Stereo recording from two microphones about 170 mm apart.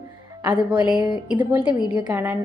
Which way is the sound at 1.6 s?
25° left (ahead or behind).